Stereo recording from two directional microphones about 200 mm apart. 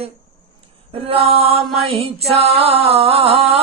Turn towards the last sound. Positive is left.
turn(degrees=-30)  # may be behind; listen again after turning